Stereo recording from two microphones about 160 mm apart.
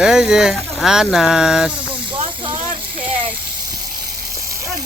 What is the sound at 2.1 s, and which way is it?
Snake, 30° right (ahead or behind).